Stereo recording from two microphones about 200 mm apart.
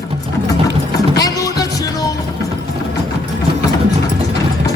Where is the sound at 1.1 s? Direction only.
20° left (ahead or behind).